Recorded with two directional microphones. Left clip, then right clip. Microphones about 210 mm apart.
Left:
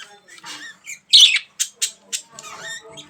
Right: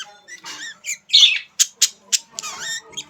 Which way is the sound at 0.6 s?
35° right (ahead or behind).